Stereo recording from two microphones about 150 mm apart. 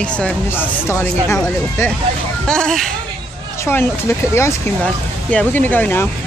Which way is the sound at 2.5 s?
5° left (ahead or behind).